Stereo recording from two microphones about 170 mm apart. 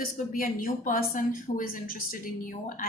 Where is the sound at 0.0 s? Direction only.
55° left (ahead or behind).